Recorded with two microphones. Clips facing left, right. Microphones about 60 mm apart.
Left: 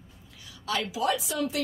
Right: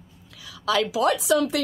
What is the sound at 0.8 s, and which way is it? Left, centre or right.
Speech, right.